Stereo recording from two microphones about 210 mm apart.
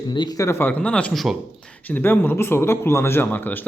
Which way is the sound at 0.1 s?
20° left (ahead or behind).